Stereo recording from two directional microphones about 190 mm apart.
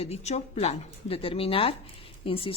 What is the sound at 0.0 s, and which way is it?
Speech, 35° left (ahead or behind).